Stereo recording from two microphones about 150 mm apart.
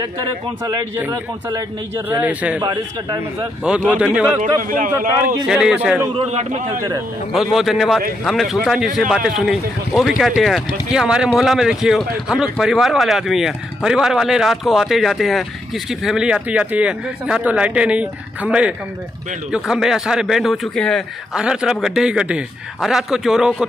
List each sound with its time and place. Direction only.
2.0 s a man's voice: 10° right (ahead or behind)
2.6 s a man's voice: 25° right (ahead or behind)
3.6 s a man's voice: 5° right (ahead or behind)
4.6 s a man's voice: 65° right (ahead or behind)
4.9 s a man's voice: 20° right (ahead or behind)
5.5 s speech: 5° right (ahead or behind)
6.1 s a man's voice: 45° right (ahead or behind)
7.3 s speech: centre (ahead or behind)